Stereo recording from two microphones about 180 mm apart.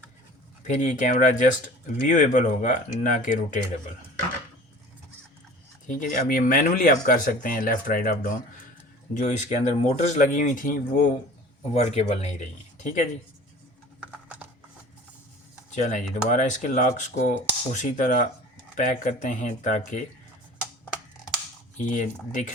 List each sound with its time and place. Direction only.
0.6 s speech: 45° left (ahead or behind)
5.9 s speech: 50° left (ahead or behind)
15.7 s speech: 45° left (ahead or behind)
21.8 s speech: 45° left (ahead or behind)